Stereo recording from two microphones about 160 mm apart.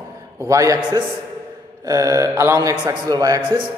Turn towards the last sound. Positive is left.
turn(degrees=-25)  # may be behind; listen again after turning